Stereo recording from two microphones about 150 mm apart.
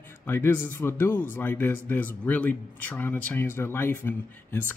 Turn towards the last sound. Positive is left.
turn(degrees=15)  # may be behind; listen again after turning